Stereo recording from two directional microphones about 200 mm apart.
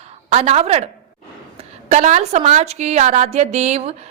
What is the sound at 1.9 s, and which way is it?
A woman's voice, 35° right (ahead or behind).